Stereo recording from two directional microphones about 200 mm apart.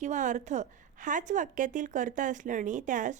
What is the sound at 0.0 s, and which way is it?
A woman's voice, 40° right (ahead or behind).